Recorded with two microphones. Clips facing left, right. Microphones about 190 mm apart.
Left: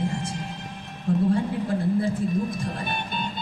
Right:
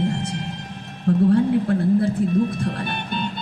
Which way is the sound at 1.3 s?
65° right (ahead or behind).